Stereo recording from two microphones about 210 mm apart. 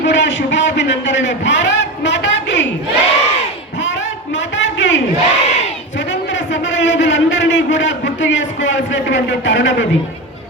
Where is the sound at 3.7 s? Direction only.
60° left (ahead or behind).